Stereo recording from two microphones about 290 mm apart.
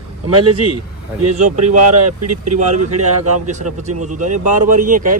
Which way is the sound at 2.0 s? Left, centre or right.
Right.